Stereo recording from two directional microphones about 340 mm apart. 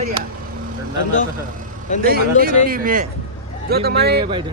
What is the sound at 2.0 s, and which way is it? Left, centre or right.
Speech, right.